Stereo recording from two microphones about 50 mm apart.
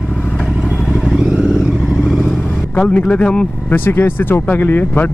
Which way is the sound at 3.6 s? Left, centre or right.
Left.